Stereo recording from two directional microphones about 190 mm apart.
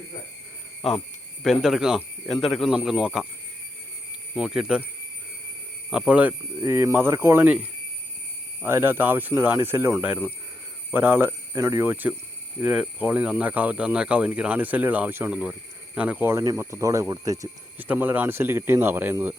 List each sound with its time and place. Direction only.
0.8 s speech: 30° left (ahead or behind)
1.5 s speech: centre (ahead or behind)
4.4 s speech: 5° right (ahead or behind)
5.9 s speech: 5° right (ahead or behind)